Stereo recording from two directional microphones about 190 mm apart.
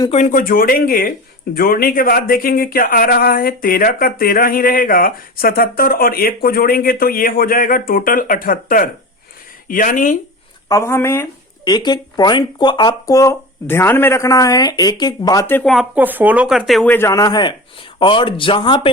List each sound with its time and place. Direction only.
0.1 s speech: 40° left (ahead or behind)
10.7 s speech: 15° left (ahead or behind)